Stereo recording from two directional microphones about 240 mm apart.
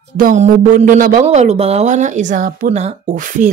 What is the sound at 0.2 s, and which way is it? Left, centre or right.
A woman's voice, right.